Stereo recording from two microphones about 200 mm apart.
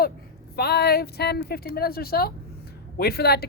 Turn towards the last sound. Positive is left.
turn(degrees=50)  # may be behind; listen again after turning